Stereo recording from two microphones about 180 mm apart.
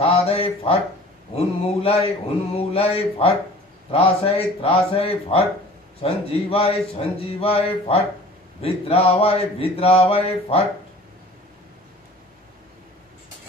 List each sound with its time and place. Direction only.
0.0 s speech: 35° left (ahead or behind)